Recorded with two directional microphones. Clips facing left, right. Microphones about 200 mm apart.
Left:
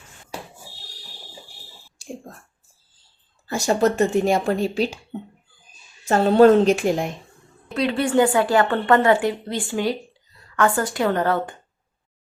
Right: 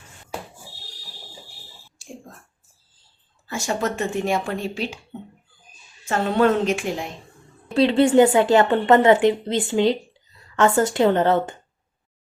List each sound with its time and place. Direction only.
3.4 s speech: 35° left (ahead or behind)
6.1 s speech: 35° left (ahead or behind)
7.7 s a woman's voice: 25° right (ahead or behind)